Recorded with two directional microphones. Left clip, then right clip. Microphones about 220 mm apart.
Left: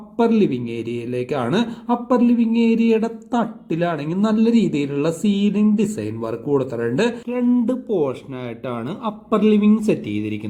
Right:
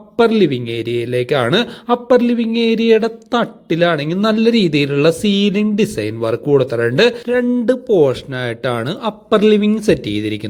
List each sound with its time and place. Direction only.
0.2 s a man's voice: 20° right (ahead or behind)